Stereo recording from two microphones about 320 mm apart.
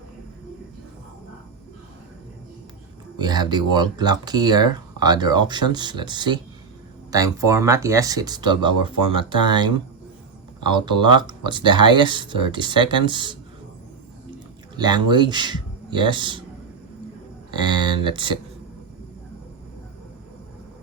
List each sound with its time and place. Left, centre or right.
3.2 s speech: centre
14.8 s speech: centre
17.5 s speech: centre